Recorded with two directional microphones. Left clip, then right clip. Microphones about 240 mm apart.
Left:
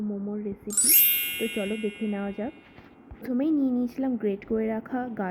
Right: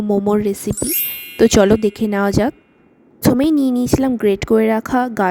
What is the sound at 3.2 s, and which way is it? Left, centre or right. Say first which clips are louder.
Speech: right 11 dB; right.